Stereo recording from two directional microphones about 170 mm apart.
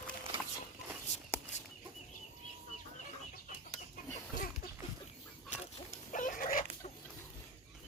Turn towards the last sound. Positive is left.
turn(degrees=55)  # may be behind; listen again after turning